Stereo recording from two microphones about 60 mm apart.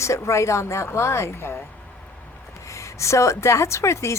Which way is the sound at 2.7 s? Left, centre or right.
Left.